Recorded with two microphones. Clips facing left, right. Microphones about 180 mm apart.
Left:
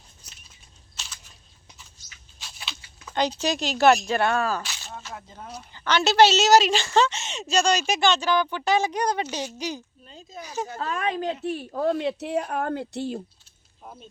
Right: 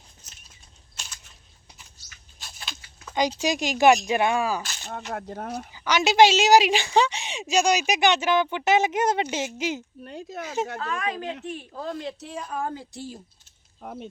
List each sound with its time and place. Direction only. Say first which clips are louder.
3.2 s a woman's voice: right 1 dB; 10° right (ahead or behind)
5.1 s speech: right 7 dB; 65° right (ahead or behind)
5.7 s a woman's voice: even; 10° right (ahead or behind)
10.0 s speech: right 7 dB; 65° right (ahead or behind)
10.4 s speech: right 3 dB; 25° right (ahead or behind)
10.8 s speech: left 2 dB; 35° left (ahead or behind)
11.7 s a woman's voice: left 10 dB; 60° left (ahead or behind)
13.8 s speech: right 7 dB; 65° right (ahead or behind)